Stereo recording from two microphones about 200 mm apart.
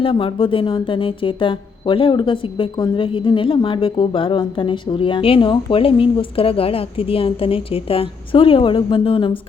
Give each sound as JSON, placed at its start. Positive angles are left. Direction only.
{"t": 0.0, "sound": "speech", "side_deg": 25}